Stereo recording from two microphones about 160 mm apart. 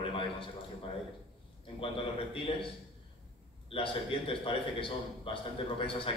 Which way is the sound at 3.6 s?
35° left (ahead or behind).